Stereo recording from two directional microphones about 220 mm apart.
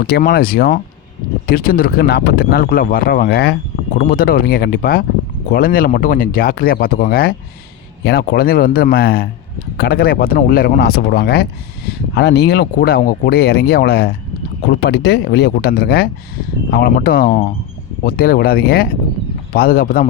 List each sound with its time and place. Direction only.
0.1 s speech: 40° left (ahead or behind)